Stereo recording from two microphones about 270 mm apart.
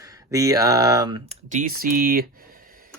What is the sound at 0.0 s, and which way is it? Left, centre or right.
Speech, centre.